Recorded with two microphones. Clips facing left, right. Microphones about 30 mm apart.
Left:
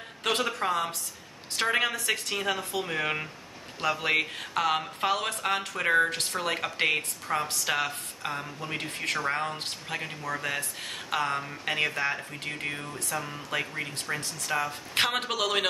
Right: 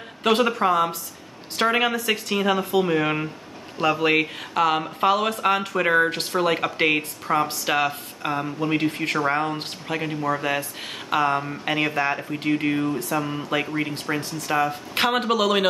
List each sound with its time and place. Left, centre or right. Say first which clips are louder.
0.2 s speech: right 8 dB; centre
2.9 s speech: right 7 dB; centre
10.2 s speech: right 7 dB; right
15.0 s speech: right 6 dB; centre